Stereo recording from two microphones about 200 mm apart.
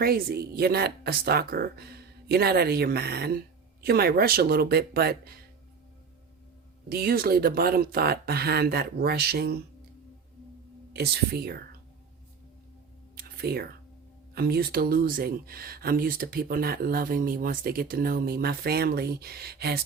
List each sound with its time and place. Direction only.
0.0 s speech: 50° right (ahead or behind)
6.8 s speech: 50° right (ahead or behind)
10.9 s speech: 55° right (ahead or behind)
13.1 s a sound: 50° right (ahead or behind)
14.3 s speech: 50° right (ahead or behind)